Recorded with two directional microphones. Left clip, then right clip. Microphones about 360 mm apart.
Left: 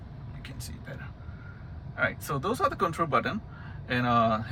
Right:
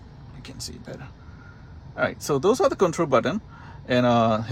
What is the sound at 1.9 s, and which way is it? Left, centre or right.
Speech, centre.